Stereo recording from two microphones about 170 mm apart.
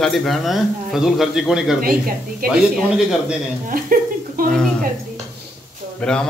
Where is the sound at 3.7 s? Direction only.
55° right (ahead or behind).